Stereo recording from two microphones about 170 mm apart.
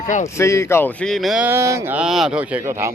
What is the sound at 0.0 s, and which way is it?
Speech, 45° left (ahead or behind).